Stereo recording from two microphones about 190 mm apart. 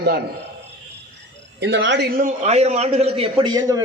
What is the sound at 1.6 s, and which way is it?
Speech, 70° right (ahead or behind).